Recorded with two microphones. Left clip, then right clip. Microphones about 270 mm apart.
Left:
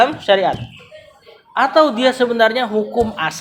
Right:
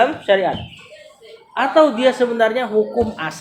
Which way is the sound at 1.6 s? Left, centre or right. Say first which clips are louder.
Left 1 dB; left.